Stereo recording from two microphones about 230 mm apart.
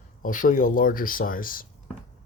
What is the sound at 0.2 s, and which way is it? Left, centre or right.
Speech, left.